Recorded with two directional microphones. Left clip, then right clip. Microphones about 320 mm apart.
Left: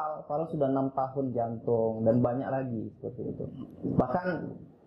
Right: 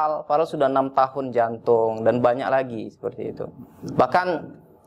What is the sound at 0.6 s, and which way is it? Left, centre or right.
Speech, centre.